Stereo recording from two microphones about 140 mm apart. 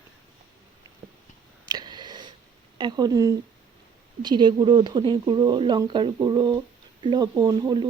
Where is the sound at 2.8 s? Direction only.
30° right (ahead or behind).